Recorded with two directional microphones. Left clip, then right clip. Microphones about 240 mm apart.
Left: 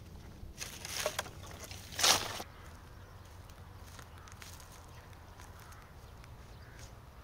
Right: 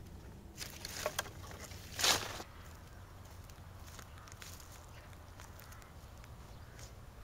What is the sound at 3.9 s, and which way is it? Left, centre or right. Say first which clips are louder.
Walk: left 1 dB; centre.